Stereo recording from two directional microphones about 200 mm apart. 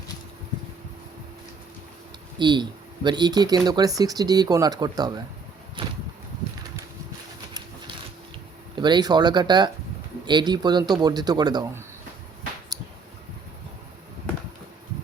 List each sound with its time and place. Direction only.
2.4 s speech: 20° right (ahead or behind)
5.8 s a sound: 25° right (ahead or behind)
8.7 s speech: 20° right (ahead or behind)